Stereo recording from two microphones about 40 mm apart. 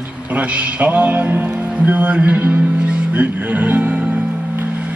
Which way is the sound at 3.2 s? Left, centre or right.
Right.